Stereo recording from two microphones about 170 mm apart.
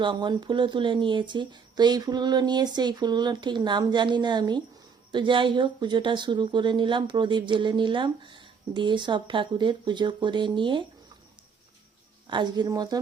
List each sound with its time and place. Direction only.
0.0 s speech: 25° right (ahead or behind)
12.3 s speech: 25° right (ahead or behind)